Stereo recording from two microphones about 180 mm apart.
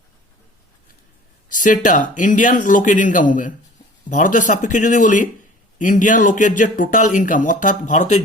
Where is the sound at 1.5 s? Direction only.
45° left (ahead or behind).